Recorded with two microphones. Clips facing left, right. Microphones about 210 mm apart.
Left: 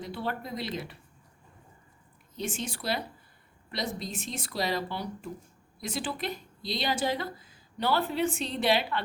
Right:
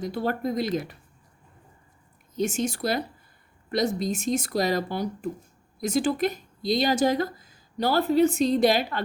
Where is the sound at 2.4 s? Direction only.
45° right (ahead or behind).